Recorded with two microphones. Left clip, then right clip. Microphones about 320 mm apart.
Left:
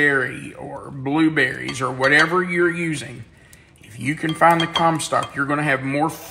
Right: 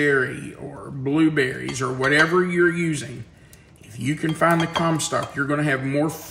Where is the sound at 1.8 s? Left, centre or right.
Centre.